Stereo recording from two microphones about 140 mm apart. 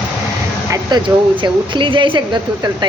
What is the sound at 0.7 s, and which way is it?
Speech, 30° right (ahead or behind).